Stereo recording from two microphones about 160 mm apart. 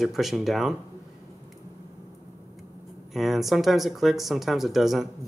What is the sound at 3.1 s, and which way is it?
Speech, centre (ahead or behind).